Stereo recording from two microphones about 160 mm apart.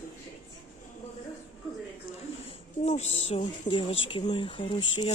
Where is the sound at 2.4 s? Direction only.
40° left (ahead or behind).